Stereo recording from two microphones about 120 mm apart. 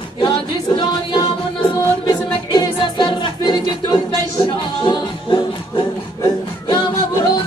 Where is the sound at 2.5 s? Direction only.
40° left (ahead or behind).